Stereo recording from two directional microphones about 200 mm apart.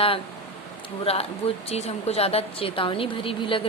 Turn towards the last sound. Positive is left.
turn(degrees=25)  # may be behind; listen again after turning